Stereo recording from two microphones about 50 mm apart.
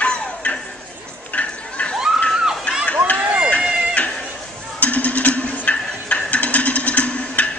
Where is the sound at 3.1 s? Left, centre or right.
Right.